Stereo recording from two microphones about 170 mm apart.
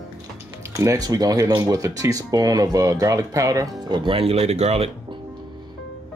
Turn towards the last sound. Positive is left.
turn(degrees=-35)  # may be behind; listen again after turning